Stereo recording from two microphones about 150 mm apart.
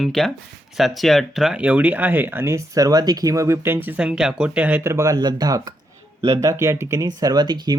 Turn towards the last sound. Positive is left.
turn(degrees=-30)  # may be behind; listen again after turning